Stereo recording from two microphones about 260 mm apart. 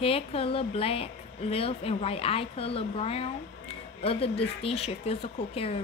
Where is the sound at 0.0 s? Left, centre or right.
Left.